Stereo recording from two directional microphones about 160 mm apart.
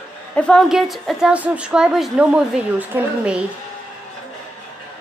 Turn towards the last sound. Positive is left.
turn(degrees=-10)  # may be behind; listen again after turning